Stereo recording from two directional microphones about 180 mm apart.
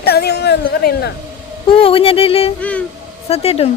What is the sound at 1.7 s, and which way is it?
Speech, 30° left (ahead or behind).